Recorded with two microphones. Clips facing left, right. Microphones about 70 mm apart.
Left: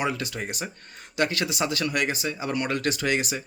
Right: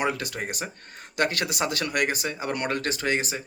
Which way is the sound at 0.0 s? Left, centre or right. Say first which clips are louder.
Right 1 dB; right.